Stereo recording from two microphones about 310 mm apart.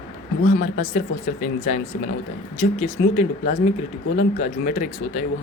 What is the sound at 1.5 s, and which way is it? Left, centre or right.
A woman's voice, left.